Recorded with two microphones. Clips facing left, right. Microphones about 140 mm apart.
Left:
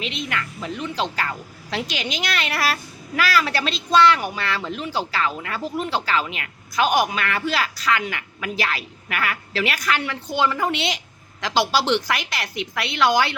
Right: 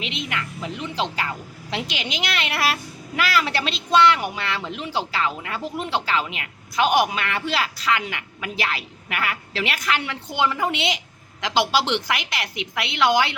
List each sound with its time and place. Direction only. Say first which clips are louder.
0.0 s speech: left 1 dB; 20° right (ahead or behind)